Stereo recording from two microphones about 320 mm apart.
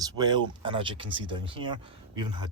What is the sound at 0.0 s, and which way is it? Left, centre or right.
Speech, centre.